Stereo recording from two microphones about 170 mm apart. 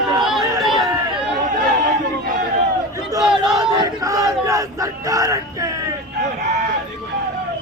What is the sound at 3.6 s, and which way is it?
Crowd, 20° right (ahead or behind).